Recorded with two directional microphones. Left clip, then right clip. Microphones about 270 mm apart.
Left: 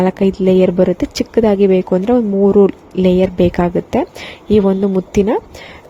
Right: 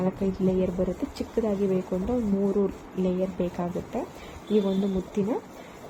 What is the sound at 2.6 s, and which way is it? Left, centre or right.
A woman's voice, left.